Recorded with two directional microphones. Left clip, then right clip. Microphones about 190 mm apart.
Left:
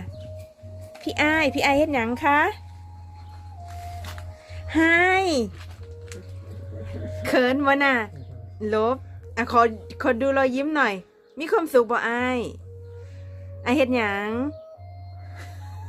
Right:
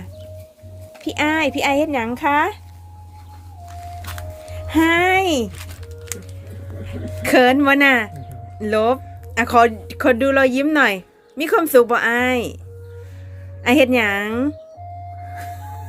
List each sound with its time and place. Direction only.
1.0 s speech: 20° left (ahead or behind)
4.7 s speech: 20° left (ahead or behind)
6.8 s speech: centre (ahead or behind)
13.6 s speech: centre (ahead or behind)